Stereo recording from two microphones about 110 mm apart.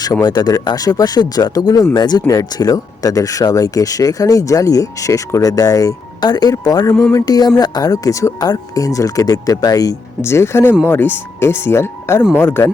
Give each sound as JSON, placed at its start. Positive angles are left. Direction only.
{"t": 0.0, "sound": "speech", "side_deg": 40}